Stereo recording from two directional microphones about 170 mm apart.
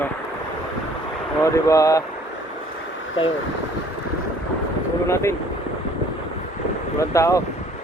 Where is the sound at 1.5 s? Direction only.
20° left (ahead or behind).